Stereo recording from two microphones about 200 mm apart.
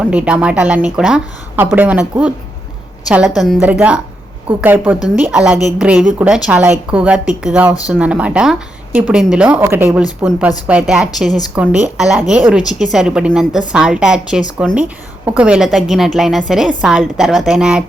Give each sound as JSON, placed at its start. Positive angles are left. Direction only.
{"t": 0.0, "sound": "a woman's voice", "side_deg": -5}
{"t": 11.3, "sound": "a woman's voice", "side_deg": 20}
{"t": 11.5, "sound": "a woman's voice", "side_deg": -5}